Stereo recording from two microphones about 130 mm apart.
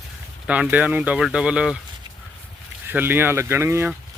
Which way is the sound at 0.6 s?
15° right (ahead or behind).